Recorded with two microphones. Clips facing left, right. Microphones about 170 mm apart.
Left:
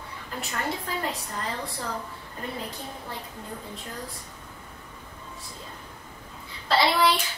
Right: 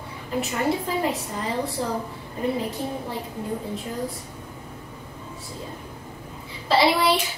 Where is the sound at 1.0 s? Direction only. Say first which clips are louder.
Right 5 dB; 5° right (ahead or behind).